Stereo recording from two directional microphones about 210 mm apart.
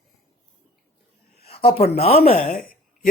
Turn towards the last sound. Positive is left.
turn(degrees=45)  # may be behind; listen again after turning